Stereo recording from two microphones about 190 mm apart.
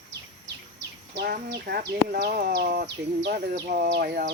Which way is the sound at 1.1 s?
55° right (ahead or behind).